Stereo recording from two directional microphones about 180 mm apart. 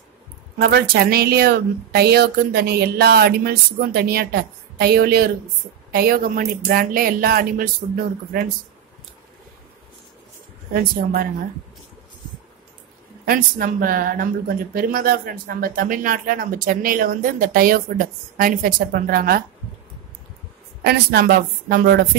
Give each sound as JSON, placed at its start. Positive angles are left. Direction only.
{"t": 0.6, "sound": "a woman's voice", "side_deg": -60}
{"t": 10.7, "sound": "a woman's voice", "side_deg": -55}
{"t": 13.2, "sound": "speech", "side_deg": -50}
{"t": 20.8, "sound": "a woman's voice", "side_deg": -60}